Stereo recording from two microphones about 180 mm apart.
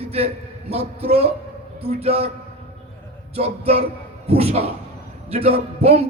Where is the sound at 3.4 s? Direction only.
35° right (ahead or behind).